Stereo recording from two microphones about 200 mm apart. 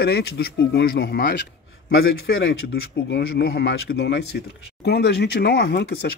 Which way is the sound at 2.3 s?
80° left.